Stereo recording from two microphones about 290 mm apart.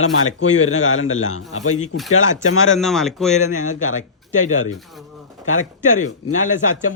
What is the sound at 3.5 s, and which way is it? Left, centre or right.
Speech, left.